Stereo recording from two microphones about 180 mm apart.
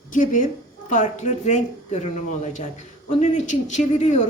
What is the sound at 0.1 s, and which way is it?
A woman's voice, 45° left (ahead or behind).